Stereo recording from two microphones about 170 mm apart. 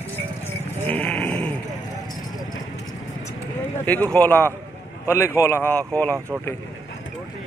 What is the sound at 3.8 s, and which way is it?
Speech, 10° left (ahead or behind).